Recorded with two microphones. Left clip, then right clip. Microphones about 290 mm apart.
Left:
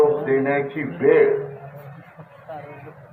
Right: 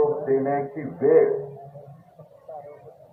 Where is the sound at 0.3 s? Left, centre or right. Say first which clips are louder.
Left 3 dB; left.